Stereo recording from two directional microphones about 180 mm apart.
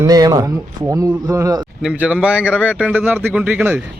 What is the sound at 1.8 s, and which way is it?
Speech, 5° right (ahead or behind).